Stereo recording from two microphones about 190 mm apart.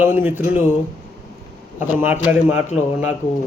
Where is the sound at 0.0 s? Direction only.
10° right (ahead or behind).